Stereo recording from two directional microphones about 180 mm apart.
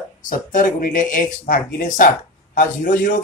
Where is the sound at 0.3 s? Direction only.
45° left (ahead or behind).